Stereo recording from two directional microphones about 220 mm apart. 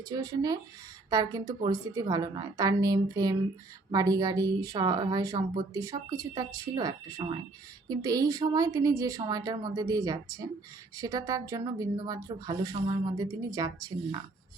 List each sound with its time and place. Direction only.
0.2 s speech: 15° right (ahead or behind)